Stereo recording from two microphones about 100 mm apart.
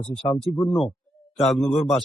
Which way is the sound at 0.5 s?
15° left (ahead or behind).